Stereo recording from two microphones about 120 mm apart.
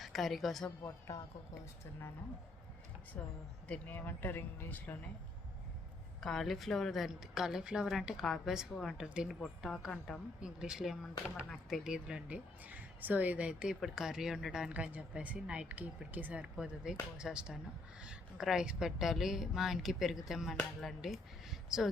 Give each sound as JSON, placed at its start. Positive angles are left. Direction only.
{"t": 0.0, "sound": "a woman's voice", "side_deg": 0}
{"t": 0.8, "sound": "speech", "side_deg": 25}
{"t": 3.1, "sound": "speech", "side_deg": 10}
{"t": 6.1, "sound": "a woman's voice", "side_deg": 5}